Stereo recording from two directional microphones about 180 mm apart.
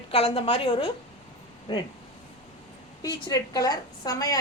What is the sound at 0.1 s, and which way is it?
Speech, 30° left (ahead or behind).